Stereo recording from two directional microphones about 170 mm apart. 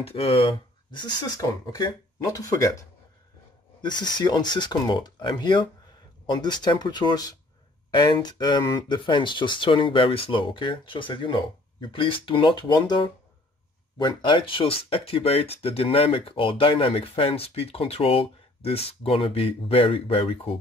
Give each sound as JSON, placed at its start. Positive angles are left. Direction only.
{"t": 0.0, "sound": "speech", "side_deg": 35}